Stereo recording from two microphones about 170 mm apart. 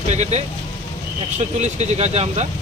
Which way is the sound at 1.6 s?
40° right (ahead or behind).